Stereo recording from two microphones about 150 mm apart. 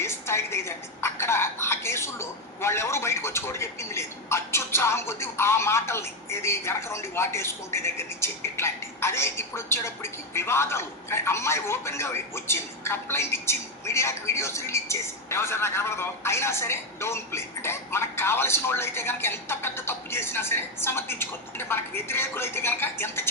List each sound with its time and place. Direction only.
0.0 s a woman's voice: 15° left (ahead or behind)